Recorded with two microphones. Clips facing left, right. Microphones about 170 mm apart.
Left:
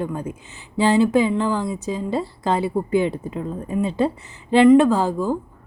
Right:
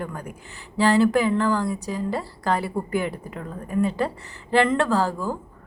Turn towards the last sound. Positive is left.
turn(degrees=20)  # may be behind; listen again after turning